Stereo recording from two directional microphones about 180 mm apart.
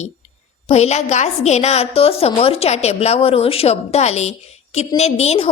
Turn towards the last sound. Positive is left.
turn(degrees=35)  # may be behind; listen again after turning